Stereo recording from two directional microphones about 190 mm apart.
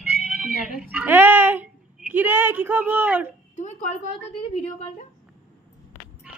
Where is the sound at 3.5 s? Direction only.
40° left (ahead or behind).